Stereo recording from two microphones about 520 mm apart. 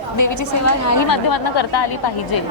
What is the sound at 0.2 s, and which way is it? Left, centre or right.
A woman's voice, left.